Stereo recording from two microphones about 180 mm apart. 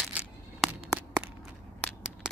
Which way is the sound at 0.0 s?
5° right (ahead or behind).